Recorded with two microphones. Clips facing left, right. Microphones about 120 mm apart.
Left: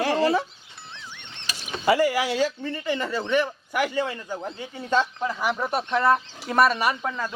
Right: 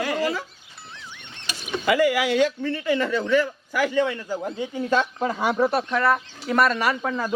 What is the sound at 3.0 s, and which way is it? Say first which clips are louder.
Speech: right 2 dB; 25° left (ahead or behind).